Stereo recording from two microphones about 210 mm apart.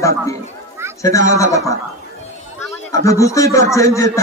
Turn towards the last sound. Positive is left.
turn(degrees=15)  # may be behind; listen again after turning